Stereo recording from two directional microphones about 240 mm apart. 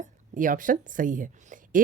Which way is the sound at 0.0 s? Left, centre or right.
Right.